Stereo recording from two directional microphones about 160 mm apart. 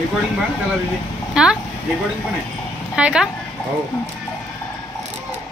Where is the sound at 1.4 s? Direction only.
5° right (ahead or behind).